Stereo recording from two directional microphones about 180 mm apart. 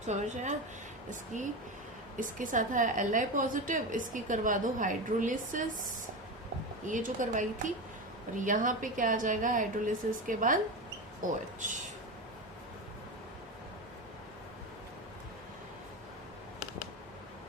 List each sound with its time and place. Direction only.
0.0 s a woman's voice: 40° right (ahead or behind)